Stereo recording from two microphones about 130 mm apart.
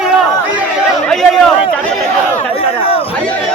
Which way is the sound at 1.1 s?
5° left (ahead or behind).